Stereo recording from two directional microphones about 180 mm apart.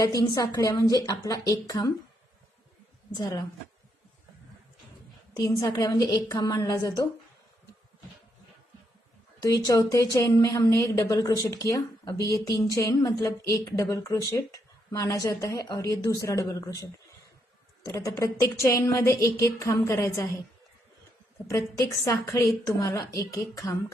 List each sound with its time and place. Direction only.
0.0 s speech: 20° left (ahead or behind)
3.2 s speech: 20° left (ahead or behind)
5.3 s speech: 20° left (ahead or behind)
9.4 s speech: 20° left (ahead or behind)
21.5 s speech: 15° left (ahead or behind)